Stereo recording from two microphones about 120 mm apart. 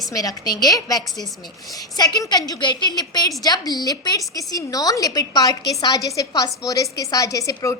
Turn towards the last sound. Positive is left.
turn(degrees=25)  # may be behind; listen again after turning